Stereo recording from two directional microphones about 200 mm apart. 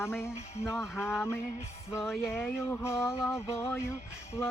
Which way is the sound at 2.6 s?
10° left (ahead or behind).